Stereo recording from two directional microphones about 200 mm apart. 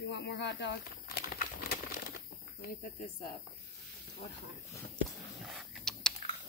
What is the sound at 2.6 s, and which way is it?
Speech, 45° left (ahead or behind).